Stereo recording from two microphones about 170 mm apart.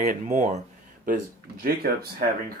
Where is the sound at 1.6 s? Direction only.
60° right (ahead or behind).